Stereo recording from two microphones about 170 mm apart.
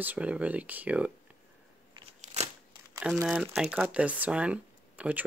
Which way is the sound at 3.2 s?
5° right (ahead or behind).